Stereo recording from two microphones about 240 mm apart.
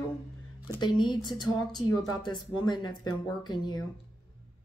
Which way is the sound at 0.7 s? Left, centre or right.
Centre.